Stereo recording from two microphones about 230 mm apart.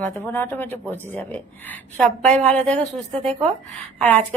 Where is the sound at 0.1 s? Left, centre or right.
Centre.